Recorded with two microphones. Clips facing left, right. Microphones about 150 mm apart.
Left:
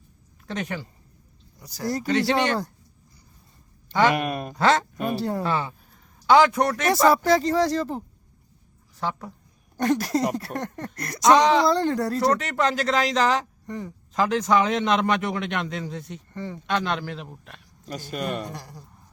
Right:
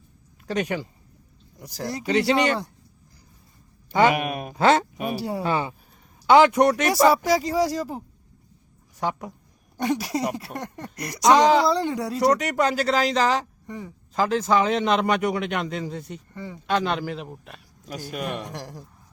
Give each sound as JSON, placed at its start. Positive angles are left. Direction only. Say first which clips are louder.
{"t": 2.0, "sound": "speech", "louder": "right 2 dB", "side_deg": -5}
{"t": 3.9, "sound": "speech", "louder": "right 1 dB", "side_deg": -10}